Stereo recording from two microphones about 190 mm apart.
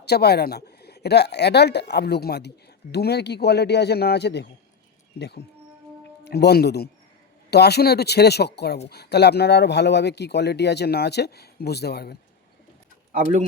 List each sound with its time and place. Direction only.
0.0 s speech: 60° left (ahead or behind)
6.2 s speech: 60° left (ahead or behind)